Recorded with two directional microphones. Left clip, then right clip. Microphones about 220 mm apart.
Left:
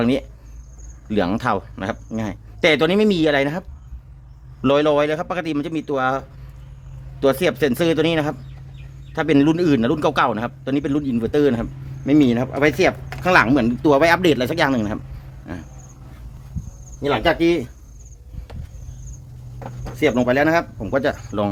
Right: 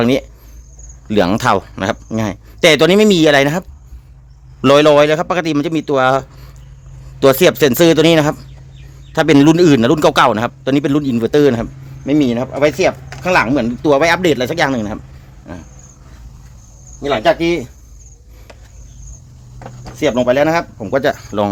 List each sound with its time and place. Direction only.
0.0 s a man's voice: 35° right (ahead or behind)
4.6 s a man's voice: 45° right (ahead or behind)
12.0 s speech: 10° right (ahead or behind)
17.0 s speech: 20° right (ahead or behind)
20.0 s speech: 20° right (ahead or behind)